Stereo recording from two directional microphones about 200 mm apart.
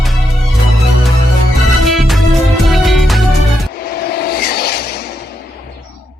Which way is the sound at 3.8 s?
50° left (ahead or behind).